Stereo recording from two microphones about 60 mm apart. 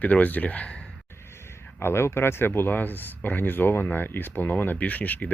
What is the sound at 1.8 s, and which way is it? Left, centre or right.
Speech, left.